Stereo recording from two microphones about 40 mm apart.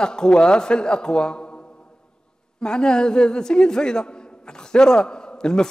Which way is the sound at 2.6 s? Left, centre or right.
Centre.